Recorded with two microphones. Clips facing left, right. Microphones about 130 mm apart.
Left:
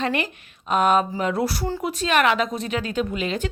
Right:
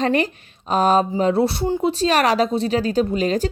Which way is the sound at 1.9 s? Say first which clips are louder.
Left 1 dB; 35° right (ahead or behind).